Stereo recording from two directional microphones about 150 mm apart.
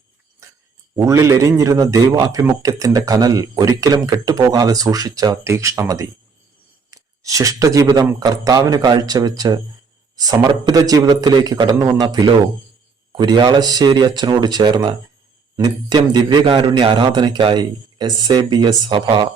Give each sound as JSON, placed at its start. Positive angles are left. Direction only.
{"t": 0.9, "sound": "speech", "side_deg": -20}
{"t": 2.4, "sound": "speech", "side_deg": -20}